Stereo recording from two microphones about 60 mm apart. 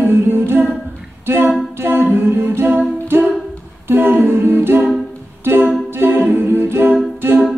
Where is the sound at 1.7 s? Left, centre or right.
Right.